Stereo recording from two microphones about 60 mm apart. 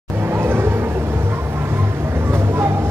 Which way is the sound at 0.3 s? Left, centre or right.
Right.